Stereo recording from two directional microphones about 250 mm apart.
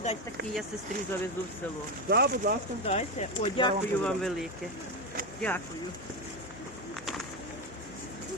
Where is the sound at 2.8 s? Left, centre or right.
Left.